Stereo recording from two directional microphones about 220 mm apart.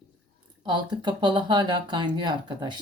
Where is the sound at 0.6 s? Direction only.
20° right (ahead or behind).